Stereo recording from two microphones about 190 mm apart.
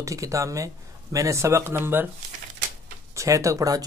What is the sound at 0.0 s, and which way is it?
Speech, 15° right (ahead or behind).